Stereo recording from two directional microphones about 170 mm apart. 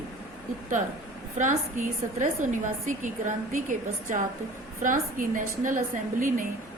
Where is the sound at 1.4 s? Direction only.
50° right (ahead or behind).